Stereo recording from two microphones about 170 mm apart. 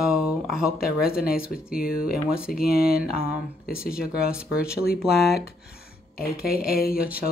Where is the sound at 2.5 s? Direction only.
60° left (ahead or behind).